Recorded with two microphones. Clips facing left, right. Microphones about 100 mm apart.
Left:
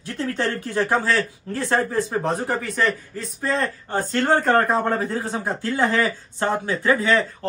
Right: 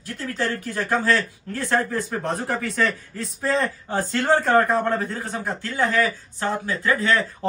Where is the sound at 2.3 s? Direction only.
Centre (ahead or behind); by 7.1 s 20° left (ahead or behind).